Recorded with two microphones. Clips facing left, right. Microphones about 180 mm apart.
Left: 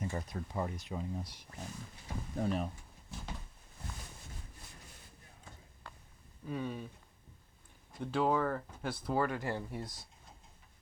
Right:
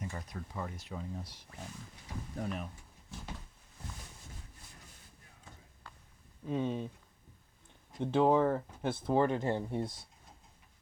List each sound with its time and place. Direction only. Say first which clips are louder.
0.1 s speech: left 4 dB; 25° left (ahead or behind)
2.3 s speech: left 5 dB; 30° left (ahead or behind)
6.5 s speech: right 5 dB; 20° right (ahead or behind)
7.9 s speech: right 5 dB; 20° right (ahead or behind)